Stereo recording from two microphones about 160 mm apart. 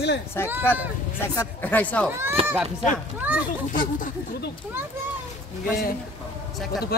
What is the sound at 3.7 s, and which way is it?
Speech, 60° left (ahead or behind).